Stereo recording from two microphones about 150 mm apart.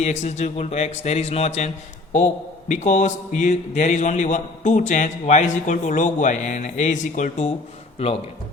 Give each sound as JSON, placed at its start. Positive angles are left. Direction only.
{"t": 0.0, "sound": "a man's voice", "side_deg": 50}